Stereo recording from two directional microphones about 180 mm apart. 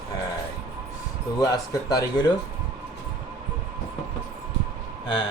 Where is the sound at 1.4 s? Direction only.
20° left (ahead or behind).